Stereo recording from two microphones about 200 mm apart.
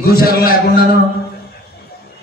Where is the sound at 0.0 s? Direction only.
50° left (ahead or behind).